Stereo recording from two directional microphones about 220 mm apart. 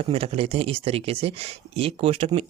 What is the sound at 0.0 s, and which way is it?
Speech, 25° right (ahead or behind).